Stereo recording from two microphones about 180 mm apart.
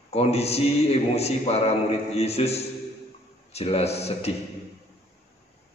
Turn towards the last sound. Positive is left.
turn(degrees=35)  # may be behind; listen again after turning